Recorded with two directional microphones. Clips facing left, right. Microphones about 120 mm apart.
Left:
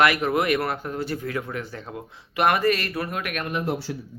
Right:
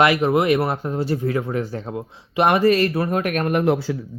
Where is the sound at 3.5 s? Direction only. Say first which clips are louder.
Right 9 dB; 60° right (ahead or behind).